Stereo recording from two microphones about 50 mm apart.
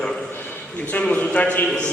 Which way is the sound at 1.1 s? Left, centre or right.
Left.